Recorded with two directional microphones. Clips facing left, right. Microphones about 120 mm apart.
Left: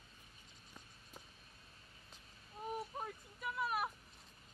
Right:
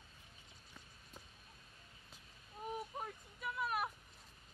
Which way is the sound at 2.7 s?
Centre (ahead or behind).